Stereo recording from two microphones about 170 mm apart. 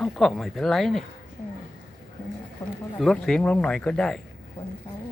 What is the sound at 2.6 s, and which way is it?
Speech, 20° left (ahead or behind).